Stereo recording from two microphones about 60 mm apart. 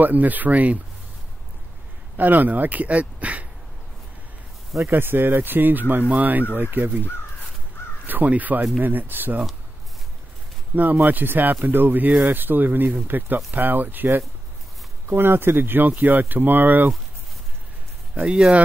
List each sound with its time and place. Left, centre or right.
0.0 s speech: right
2.1 s speech: right
4.8 s speech: right
8.1 s speech: right
10.8 s speech: right
18.1 s speech: centre